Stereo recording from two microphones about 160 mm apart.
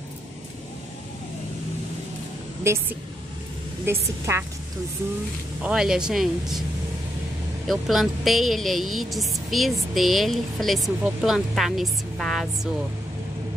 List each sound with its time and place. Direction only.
2.6 s a woman's voice: 15° right (ahead or behind)
5.6 s a woman's voice: 5° right (ahead or behind)
7.6 s a woman's voice: centre (ahead or behind)